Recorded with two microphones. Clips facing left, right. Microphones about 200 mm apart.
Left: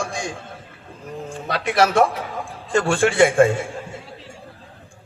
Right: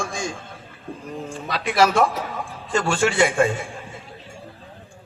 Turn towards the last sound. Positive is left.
turn(degrees=55)  # may be behind; listen again after turning